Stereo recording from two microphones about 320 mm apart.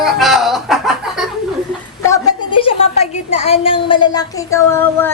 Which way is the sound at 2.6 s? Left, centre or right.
Centre.